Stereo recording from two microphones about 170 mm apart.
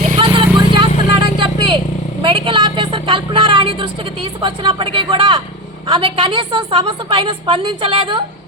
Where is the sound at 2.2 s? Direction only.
30° right (ahead or behind).